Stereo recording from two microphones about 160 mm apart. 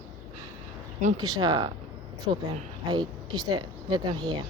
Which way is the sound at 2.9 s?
25° right (ahead or behind).